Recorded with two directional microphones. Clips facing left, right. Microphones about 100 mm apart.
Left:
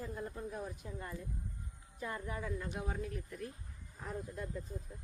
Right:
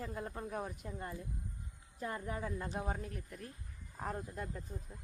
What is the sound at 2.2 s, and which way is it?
Speech, 40° right (ahead or behind).